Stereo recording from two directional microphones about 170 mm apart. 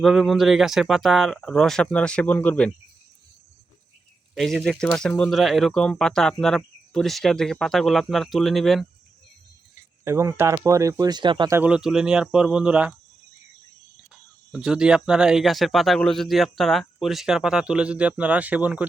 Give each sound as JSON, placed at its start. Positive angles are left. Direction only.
{"t": 0.0, "sound": "speech", "side_deg": 0}
{"t": 4.4, "sound": "speech", "side_deg": 0}
{"t": 10.0, "sound": "speech", "side_deg": -15}
{"t": 11.5, "sound": "speech", "side_deg": -5}
{"t": 14.5, "sound": "speech", "side_deg": -5}